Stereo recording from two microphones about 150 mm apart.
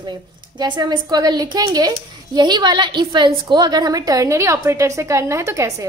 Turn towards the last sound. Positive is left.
turn(degrees=-20)  # may be behind; listen again after turning